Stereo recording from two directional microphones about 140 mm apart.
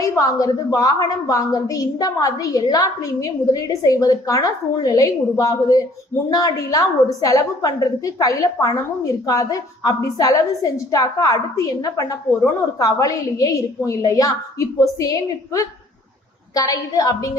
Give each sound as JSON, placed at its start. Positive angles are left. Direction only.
{"t": 0.0, "sound": "a woman's voice", "side_deg": 25}